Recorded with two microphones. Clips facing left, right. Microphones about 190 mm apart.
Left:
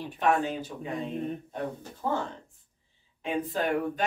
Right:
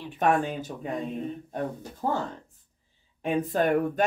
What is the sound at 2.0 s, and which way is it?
Speech, 40° right (ahead or behind).